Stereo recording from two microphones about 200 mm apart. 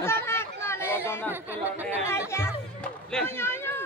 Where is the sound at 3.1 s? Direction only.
10° left (ahead or behind).